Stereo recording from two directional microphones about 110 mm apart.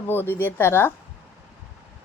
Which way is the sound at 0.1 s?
20° left (ahead or behind).